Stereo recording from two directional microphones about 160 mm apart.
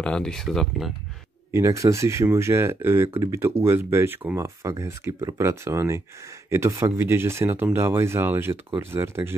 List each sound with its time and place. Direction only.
0.0 s speech: 5° left (ahead or behind)
1.5 s speech: 20° right (ahead or behind)